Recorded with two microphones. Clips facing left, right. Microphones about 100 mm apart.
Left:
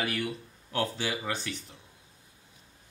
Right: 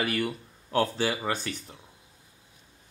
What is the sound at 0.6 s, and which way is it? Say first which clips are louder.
Speech: right 5 dB; 40° right (ahead or behind).